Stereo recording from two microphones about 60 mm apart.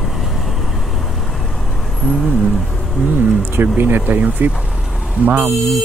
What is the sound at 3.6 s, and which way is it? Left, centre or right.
Speech, right.